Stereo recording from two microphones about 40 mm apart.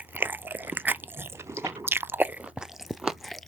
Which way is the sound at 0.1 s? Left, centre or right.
Right.